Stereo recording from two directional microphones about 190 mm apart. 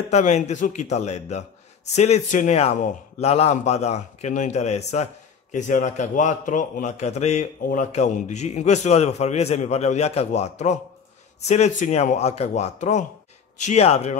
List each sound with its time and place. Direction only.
0.1 s a man's voice: 35° left (ahead or behind)